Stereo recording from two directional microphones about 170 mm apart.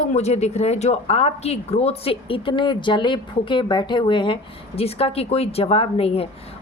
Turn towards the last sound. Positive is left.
turn(degrees=35)  # may be behind; listen again after turning